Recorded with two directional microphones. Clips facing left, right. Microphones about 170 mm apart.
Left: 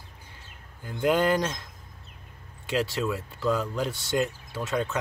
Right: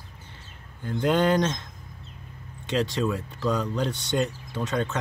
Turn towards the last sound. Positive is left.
turn(degrees=5)  # may be behind; listen again after turning